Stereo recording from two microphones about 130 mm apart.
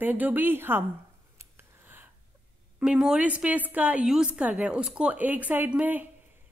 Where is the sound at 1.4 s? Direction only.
20° right (ahead or behind).